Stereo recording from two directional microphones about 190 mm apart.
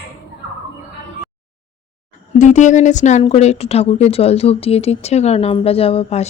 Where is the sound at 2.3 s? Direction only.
40° left (ahead or behind).